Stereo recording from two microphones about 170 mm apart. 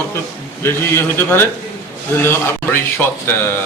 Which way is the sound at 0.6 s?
15° left (ahead or behind).